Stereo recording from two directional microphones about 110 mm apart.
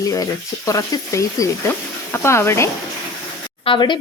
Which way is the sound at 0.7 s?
30° left (ahead or behind).